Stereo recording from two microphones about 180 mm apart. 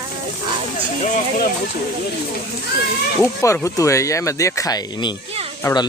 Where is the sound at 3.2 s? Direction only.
15° left (ahead or behind).